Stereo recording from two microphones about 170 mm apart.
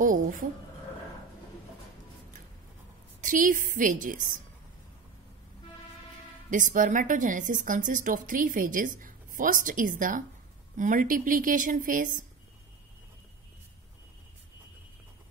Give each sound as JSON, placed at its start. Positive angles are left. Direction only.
{"t": 0.0, "sound": "a sound", "side_deg": -50}
{"t": 3.2, "sound": "a woman's voice", "side_deg": -50}
{"t": 6.5, "sound": "a woman's voice", "side_deg": -50}